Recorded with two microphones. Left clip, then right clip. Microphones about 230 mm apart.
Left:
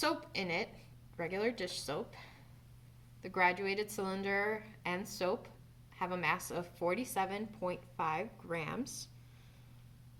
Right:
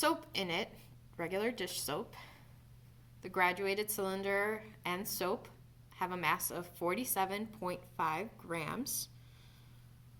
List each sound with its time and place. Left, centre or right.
0.0 s a woman's voice: right